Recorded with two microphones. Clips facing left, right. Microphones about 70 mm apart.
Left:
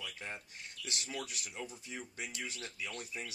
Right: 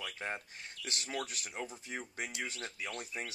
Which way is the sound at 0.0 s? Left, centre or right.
Right.